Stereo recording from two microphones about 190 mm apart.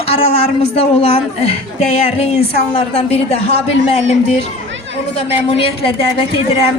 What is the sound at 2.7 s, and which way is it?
A woman's voice, 30° left (ahead or behind).